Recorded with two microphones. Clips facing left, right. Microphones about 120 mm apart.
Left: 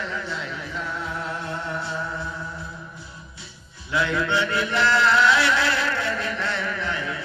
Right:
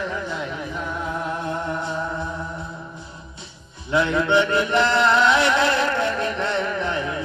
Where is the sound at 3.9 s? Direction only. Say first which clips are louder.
Right 5 dB; 20° right (ahead or behind).